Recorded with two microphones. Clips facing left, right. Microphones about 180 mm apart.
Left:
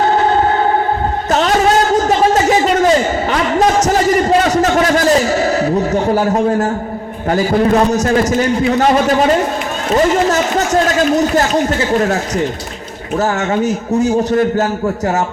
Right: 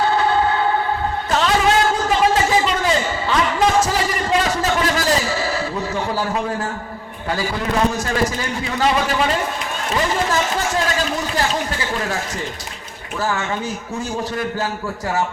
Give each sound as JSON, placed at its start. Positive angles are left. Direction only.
{"t": 0.1, "sound": "music", "side_deg": 40}
{"t": 1.3, "sound": "a sound", "side_deg": 40}
{"t": 7.3, "sound": "a man's voice", "side_deg": 45}